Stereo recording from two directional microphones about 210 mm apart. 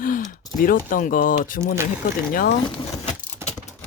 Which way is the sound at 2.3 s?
45° left (ahead or behind).